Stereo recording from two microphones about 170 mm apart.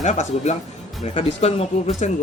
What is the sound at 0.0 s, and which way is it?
Speech, 45° left (ahead or behind).